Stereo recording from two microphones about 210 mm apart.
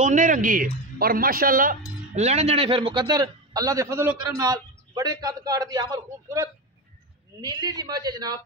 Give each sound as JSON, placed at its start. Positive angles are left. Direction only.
{"t": 0.0, "sound": "speech", "side_deg": -40}
{"t": 2.1, "sound": "a man's voice", "side_deg": -30}